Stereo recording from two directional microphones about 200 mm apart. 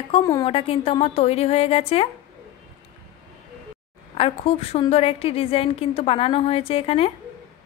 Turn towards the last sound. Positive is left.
turn(degrees=30)  # may be behind; listen again after turning